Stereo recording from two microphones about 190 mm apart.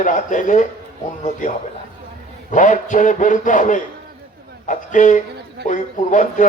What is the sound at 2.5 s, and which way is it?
A man's voice, 40° left (ahead or behind).